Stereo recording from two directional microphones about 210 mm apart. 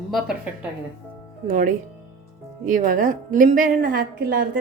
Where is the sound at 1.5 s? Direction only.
40° right (ahead or behind).